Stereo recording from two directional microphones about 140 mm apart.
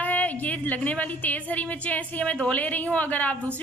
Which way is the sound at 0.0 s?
10° left (ahead or behind).